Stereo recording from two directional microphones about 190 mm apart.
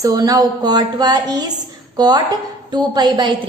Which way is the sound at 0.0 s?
20° right (ahead or behind).